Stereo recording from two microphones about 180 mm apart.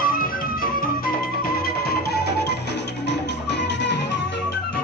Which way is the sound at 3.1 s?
75° left (ahead or behind).